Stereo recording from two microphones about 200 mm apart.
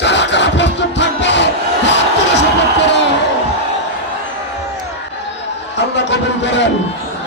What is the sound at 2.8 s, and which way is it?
Slam, 60° left (ahead or behind).